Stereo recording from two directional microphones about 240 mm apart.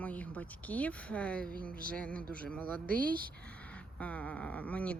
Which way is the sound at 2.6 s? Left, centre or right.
Right.